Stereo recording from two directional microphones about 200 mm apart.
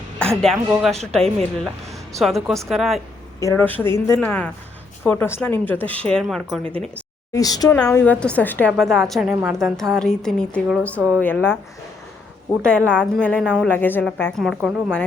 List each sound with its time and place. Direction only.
0.3 s speech: centre (ahead or behind)
3.4 s speech: 10° left (ahead or behind)
7.3 s speech: 20° left (ahead or behind)
7.8 s speech: 5° left (ahead or behind)
9.3 s a woman's voice: 10° right (ahead or behind)
9.7 s speech: centre (ahead or behind)
12.5 s speech: centre (ahead or behind)